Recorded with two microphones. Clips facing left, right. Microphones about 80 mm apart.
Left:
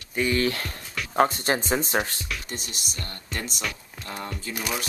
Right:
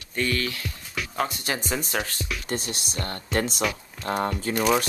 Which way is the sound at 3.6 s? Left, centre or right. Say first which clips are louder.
Right 6 dB; centre.